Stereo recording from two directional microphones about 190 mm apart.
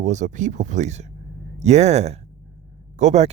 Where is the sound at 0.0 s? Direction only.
40° right (ahead or behind).